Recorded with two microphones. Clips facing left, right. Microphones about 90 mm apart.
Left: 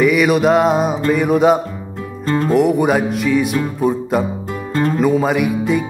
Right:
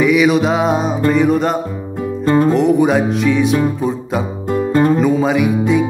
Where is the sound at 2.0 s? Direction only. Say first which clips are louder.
Right 6 dB; 15° right (ahead or behind).